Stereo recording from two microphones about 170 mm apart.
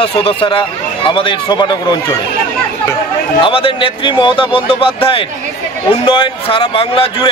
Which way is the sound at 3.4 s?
30° left (ahead or behind).